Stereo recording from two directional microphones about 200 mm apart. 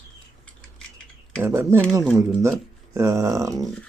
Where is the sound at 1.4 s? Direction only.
15° right (ahead or behind).